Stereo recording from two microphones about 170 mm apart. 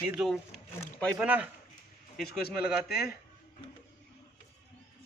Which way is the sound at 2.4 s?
65° left (ahead or behind).